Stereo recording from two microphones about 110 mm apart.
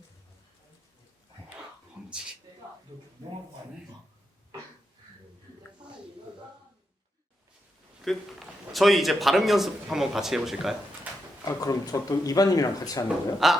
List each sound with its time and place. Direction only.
2.0 s a sound: 5° right (ahead or behind)
8.0 s a man's voice: centre (ahead or behind)
11.4 s speech: 35° left (ahead or behind)
13.4 s a man's voice: centre (ahead or behind)